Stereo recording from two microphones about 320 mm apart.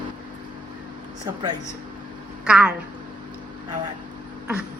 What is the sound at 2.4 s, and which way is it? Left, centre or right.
Speech, centre.